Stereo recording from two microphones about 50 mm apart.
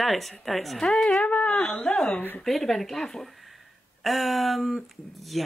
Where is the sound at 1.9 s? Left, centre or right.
Centre.